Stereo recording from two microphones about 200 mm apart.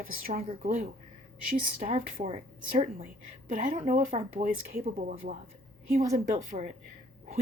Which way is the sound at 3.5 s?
40° right (ahead or behind).